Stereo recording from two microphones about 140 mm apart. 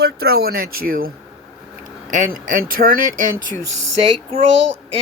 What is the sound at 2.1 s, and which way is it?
Speech, 70° right (ahead or behind).